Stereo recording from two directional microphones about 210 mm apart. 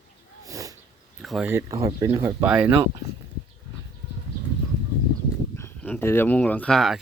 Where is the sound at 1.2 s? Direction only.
Centre (ahead or behind).